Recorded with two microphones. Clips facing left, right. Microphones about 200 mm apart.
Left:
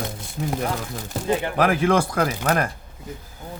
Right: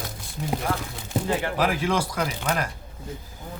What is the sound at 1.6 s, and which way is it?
Speech, 55° left (ahead or behind).